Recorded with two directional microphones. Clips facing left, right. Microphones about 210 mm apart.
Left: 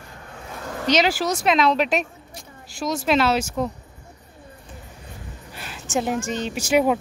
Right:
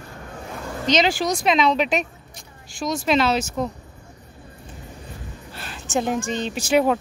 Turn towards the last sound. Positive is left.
turn(degrees=10)  # may be behind; listen again after turning